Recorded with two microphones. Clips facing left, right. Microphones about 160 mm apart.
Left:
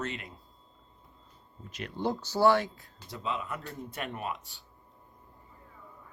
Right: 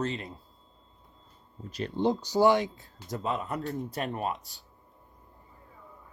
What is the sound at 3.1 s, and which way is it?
Speech, 45° right (ahead or behind).